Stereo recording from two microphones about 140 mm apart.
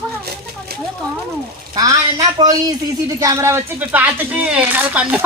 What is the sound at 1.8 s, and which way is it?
A woman's voice, 25° right (ahead or behind).